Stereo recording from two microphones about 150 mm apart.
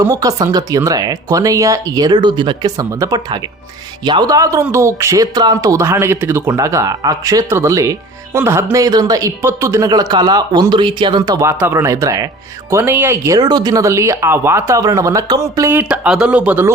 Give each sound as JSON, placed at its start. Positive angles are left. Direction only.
{"t": 0.0, "sound": "speech", "side_deg": -20}